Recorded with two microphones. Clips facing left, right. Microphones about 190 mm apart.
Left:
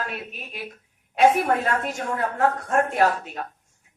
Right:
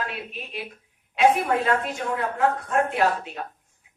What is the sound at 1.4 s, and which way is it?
Speech, 45° left (ahead or behind).